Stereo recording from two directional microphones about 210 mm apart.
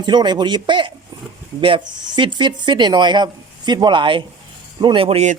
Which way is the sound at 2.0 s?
20° right (ahead or behind).